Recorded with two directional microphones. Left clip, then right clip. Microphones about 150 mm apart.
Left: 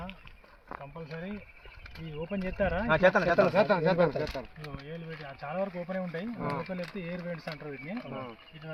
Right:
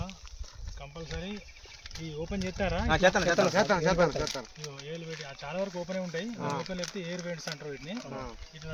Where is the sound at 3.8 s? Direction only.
20° right (ahead or behind).